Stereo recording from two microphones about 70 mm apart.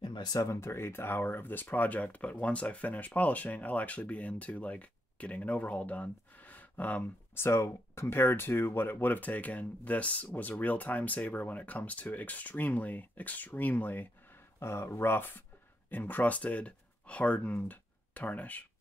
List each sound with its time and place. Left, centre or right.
0.0 s a sound: left
0.4 s speech: left
7.3 s speech: left
14.6 s speech: left